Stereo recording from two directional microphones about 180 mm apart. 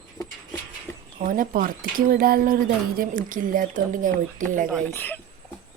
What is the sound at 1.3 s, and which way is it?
Speech, 50° right (ahead or behind).